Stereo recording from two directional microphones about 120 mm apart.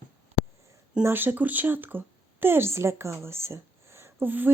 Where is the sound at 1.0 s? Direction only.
15° right (ahead or behind).